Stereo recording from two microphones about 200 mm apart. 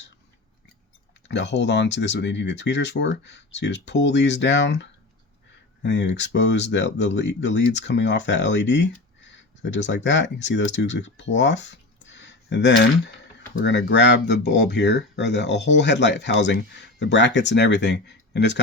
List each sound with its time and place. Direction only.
1.3 s speech: 60° left (ahead or behind)